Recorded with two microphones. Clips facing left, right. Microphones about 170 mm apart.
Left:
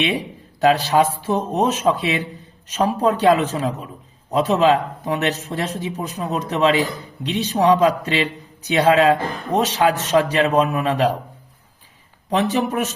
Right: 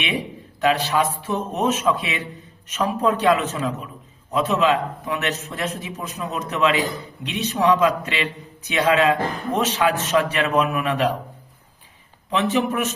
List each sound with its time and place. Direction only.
0.6 s a man's voice: 35° left (ahead or behind)
12.3 s a man's voice: 35° left (ahead or behind)